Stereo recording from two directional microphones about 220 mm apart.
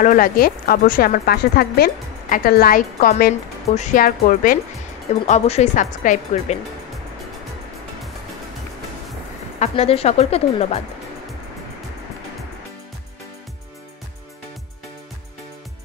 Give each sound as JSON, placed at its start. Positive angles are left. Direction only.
{"t": 0.0, "sound": "speech", "side_deg": 40}
{"t": 9.6, "sound": "speech", "side_deg": 25}